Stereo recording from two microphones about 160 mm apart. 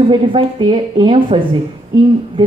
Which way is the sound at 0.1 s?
30° right (ahead or behind).